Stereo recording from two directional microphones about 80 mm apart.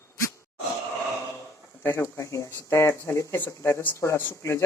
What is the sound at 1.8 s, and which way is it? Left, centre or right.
Speech, left.